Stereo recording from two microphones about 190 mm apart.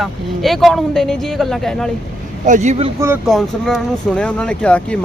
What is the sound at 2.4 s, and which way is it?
Speech, 40° right (ahead or behind).